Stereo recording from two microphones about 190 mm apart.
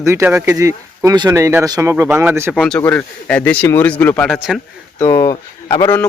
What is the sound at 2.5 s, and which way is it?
Speech, 5° left (ahead or behind).